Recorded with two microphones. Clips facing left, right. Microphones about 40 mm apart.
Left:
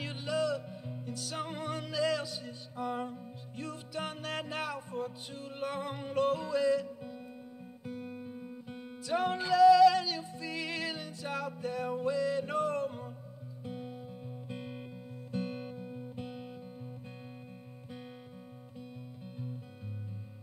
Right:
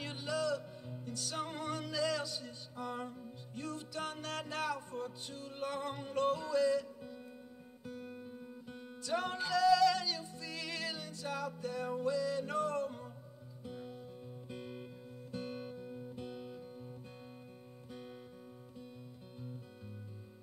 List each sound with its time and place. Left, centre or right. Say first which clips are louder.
0.0 s music: left 4 dB; centre